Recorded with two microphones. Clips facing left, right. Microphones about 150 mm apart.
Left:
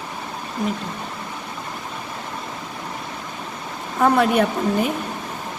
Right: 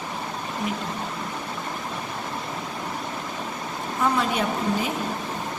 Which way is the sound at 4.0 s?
55° left (ahead or behind).